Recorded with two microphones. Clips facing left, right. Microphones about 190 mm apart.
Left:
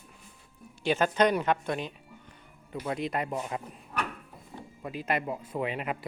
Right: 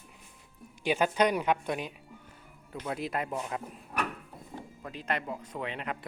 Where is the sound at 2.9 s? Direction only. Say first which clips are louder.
Left 2 dB; centre (ahead or behind).